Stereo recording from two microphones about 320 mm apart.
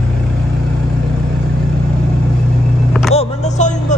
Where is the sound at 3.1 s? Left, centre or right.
Left.